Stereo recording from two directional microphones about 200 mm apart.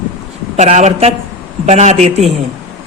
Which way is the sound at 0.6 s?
35° right (ahead or behind).